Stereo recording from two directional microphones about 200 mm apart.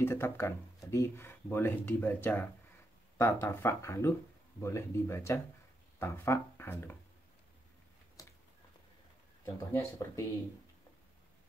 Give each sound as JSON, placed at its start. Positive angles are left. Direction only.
{"t": 0.0, "sound": "speech", "side_deg": 10}
{"t": 8.2, "sound": "a sound", "side_deg": 15}
{"t": 9.4, "sound": "speech", "side_deg": 15}